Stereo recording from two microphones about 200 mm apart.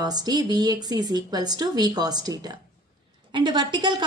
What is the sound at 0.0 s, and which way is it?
A woman's voice, 20° right (ahead or behind).